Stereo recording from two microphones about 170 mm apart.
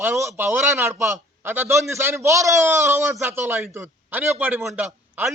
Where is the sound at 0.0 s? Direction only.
15° right (ahead or behind).